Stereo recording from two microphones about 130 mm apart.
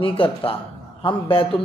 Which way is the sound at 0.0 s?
45° left (ahead or behind).